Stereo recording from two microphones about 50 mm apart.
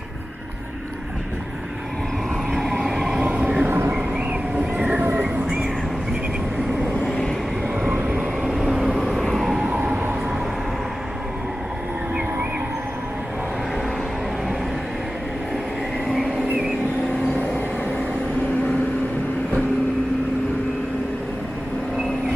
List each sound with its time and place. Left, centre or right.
2.8 s train: centre
3.2 s train: right
7.1 s vehicle: centre
8.5 s vehicle: centre
9.7 s train: right